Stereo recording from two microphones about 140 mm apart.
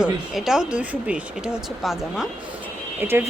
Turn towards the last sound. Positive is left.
turn(degrees=-15)  # may be behind; listen again after turning